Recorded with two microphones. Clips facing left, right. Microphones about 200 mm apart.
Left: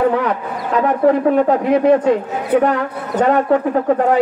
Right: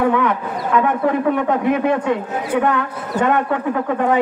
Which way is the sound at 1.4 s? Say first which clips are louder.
Left 4 dB; 35° left (ahead or behind).